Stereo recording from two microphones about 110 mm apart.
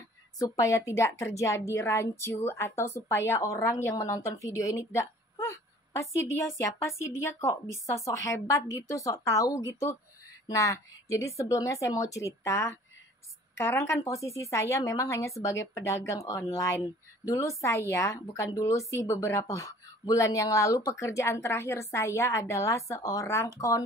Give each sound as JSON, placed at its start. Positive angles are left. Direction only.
{"t": 0.4, "sound": "a woman's voice", "side_deg": 30}